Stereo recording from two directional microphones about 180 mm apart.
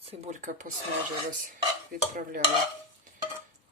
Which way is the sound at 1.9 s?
50° right (ahead or behind).